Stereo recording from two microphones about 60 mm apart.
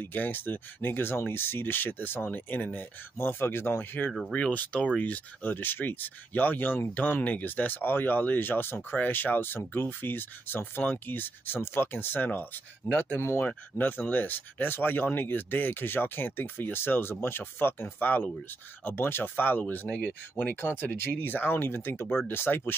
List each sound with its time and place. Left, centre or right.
0.0 s speech: left
4.3 s speech: left
13.2 s speech: left
13.5 s speech: left
20.6 s speech: left